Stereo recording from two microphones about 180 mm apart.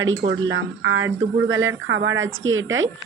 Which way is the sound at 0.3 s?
90° right.